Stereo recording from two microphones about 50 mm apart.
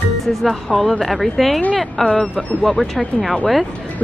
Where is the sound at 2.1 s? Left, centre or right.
Left.